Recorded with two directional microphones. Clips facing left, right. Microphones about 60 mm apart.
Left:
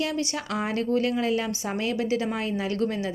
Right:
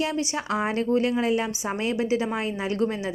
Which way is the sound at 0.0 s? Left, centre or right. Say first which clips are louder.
Right 1 dB; centre.